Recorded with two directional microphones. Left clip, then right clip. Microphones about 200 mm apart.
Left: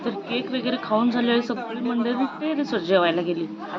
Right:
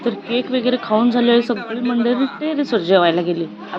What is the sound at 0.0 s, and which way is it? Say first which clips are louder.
A woman's voice: right 7 dB; 25° right (ahead or behind).